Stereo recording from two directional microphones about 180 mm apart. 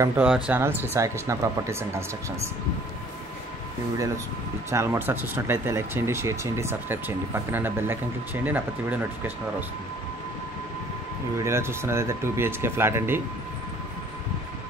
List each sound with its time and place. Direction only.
0.0 s speech: 10° right (ahead or behind)
4.6 s speech: 15° right (ahead or behind)
11.3 s speech: 15° right (ahead or behind)